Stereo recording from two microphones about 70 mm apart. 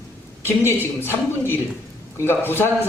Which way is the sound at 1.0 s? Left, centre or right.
Left.